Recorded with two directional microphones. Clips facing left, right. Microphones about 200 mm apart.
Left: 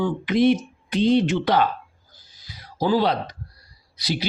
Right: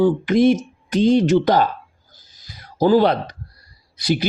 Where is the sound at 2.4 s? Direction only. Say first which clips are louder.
Right 7 dB; 45° right (ahead or behind).